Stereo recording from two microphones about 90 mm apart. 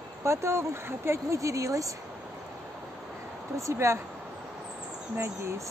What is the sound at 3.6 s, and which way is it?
Speech, 35° right (ahead or behind).